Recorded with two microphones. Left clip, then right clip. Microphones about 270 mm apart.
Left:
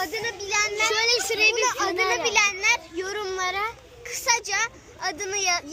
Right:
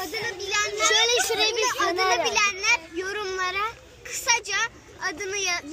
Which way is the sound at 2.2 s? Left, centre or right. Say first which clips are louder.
Left 1 dB; centre.